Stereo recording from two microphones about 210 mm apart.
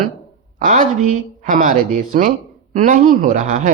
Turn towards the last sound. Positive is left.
turn(degrees=-35)  # may be behind; listen again after turning